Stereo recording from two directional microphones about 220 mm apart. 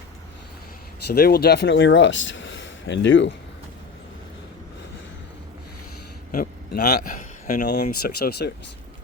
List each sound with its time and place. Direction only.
1.0 s speech: 45° left (ahead or behind)
6.7 s speech: 40° left (ahead or behind)